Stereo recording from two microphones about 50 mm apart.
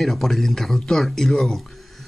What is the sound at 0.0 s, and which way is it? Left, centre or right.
Speech, centre.